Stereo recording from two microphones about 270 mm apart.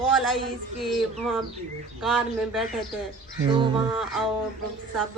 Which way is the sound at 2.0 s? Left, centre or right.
Centre.